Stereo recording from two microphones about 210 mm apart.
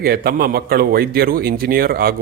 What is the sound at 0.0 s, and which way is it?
A man's voice, 45° right (ahead or behind).